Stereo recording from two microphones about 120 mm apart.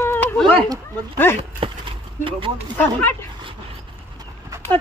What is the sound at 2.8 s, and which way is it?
Speech, 15° left (ahead or behind).